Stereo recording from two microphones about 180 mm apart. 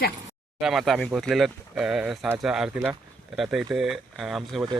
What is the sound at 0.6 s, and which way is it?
Speech, centre (ahead or behind).